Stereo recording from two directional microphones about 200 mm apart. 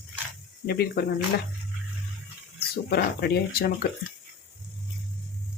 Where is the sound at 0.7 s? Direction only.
50° left (ahead or behind).